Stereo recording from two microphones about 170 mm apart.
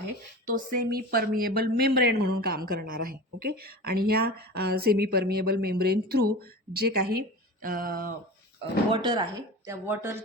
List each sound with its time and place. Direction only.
0.4 s speech: 60° right (ahead or behind)
8.9 s speech: 25° right (ahead or behind)
9.6 s speech: 15° right (ahead or behind)